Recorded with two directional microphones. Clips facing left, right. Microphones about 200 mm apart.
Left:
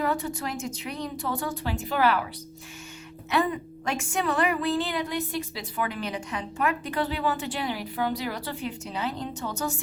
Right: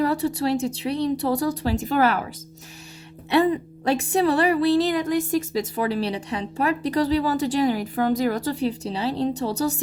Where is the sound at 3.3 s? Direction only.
30° right (ahead or behind).